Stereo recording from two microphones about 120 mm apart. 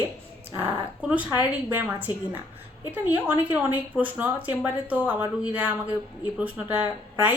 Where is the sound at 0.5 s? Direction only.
15° right (ahead or behind).